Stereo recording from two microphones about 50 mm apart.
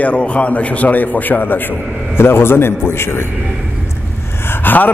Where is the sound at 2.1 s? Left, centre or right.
Left.